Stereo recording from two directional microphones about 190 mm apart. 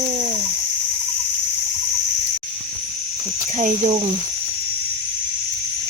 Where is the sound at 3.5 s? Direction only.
35° right (ahead or behind).